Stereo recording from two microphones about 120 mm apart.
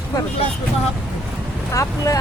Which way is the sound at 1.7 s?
25° left (ahead or behind).